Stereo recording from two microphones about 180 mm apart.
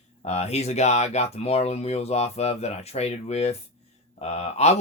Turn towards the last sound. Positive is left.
turn(degrees=35)  # may be behind; listen again after turning